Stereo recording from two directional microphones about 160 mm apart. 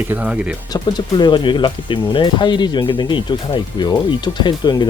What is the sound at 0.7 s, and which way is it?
Speech, 25° left (ahead or behind).